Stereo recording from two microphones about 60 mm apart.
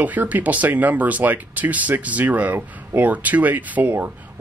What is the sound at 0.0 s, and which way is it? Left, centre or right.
Speech, right.